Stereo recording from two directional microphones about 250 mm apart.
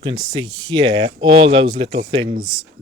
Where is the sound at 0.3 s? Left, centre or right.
Centre.